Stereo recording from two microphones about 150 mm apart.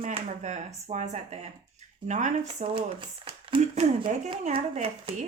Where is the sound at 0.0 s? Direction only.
45° right (ahead or behind).